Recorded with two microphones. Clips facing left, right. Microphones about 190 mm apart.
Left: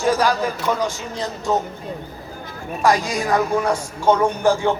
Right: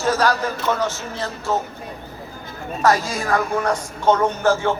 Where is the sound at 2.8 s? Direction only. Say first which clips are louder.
Even; 15° left (ahead or behind).